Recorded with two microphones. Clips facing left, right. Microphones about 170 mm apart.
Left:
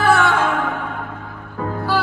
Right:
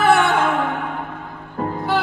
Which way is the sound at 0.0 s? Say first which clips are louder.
Right 1 dB; 20° right (ahead or behind).